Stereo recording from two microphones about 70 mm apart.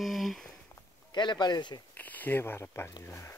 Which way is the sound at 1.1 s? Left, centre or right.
Left.